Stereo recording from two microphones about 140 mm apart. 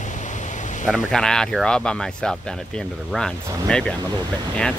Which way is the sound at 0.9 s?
5° left (ahead or behind).